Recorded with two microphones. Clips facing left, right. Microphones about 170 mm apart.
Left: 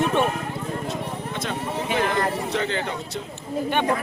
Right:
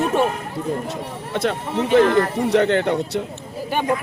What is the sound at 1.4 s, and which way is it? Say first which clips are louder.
Speech: right 8 dB; 70° right (ahead or behind).